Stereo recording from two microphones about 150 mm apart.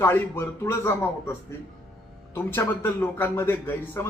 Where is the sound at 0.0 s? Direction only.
15° left (ahead or behind).